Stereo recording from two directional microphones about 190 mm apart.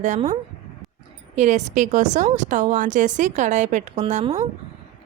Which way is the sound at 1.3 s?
40° right (ahead or behind).